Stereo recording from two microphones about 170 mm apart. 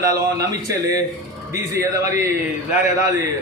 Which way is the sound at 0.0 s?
20° right (ahead or behind).